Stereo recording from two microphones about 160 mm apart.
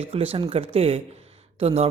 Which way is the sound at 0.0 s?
35° right (ahead or behind).